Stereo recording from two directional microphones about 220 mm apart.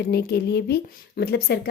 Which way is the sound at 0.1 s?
45° left (ahead or behind).